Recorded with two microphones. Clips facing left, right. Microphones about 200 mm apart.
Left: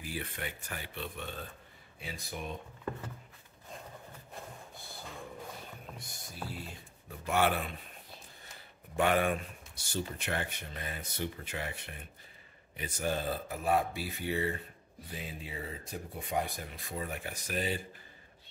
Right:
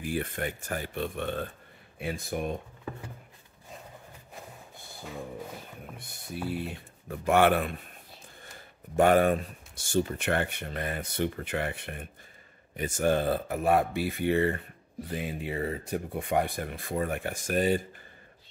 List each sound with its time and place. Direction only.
0.0 s speech: 50° right (ahead or behind)
5.9 s speech: 60° right (ahead or behind)
8.9 s speech: 45° right (ahead or behind)